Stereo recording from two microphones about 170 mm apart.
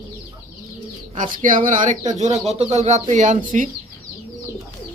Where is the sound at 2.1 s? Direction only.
40° right (ahead or behind).